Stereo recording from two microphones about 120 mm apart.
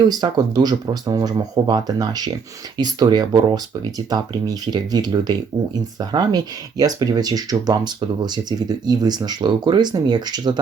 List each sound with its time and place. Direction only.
0.1 s speech: 35° right (ahead or behind)